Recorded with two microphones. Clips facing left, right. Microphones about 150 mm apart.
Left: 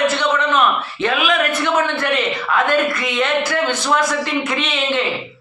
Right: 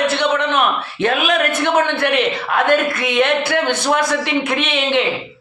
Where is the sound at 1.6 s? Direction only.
55° right (ahead or behind).